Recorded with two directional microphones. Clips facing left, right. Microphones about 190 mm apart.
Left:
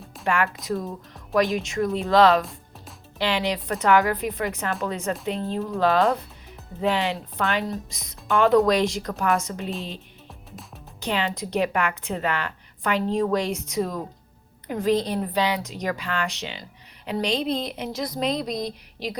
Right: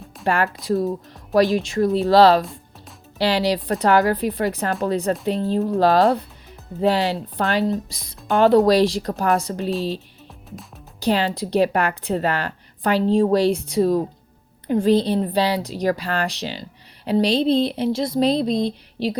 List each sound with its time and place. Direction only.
0.3 s a woman's voice: 35° right (ahead or behind)
2.4 s music: centre (ahead or behind)
3.2 s a woman's voice: 35° right (ahead or behind)
11.0 s a woman's voice: 35° right (ahead or behind)